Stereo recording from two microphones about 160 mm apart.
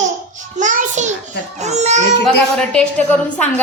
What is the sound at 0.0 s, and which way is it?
Babbling, 50° right (ahead or behind).